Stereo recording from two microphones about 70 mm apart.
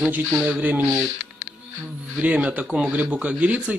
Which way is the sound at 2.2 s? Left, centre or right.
Centre.